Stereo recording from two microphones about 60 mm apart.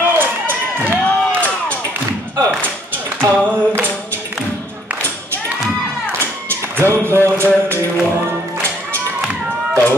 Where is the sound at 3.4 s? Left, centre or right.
Right.